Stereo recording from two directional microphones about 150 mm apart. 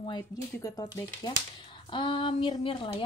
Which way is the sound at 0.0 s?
30° left (ahead or behind).